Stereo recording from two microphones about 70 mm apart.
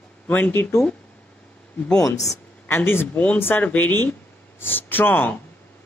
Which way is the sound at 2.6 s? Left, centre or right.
Left.